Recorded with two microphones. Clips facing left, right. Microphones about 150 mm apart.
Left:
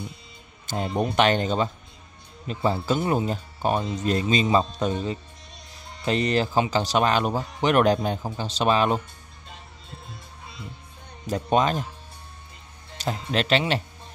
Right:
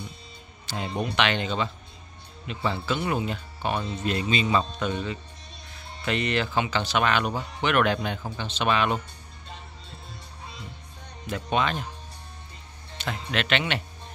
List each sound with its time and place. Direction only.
0.7 s speech: 45° left (ahead or behind)
11.2 s speech: 40° left (ahead or behind)
12.9 s speech: 35° left (ahead or behind)